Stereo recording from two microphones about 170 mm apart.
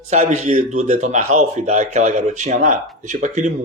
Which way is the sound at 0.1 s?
40° right (ahead or behind).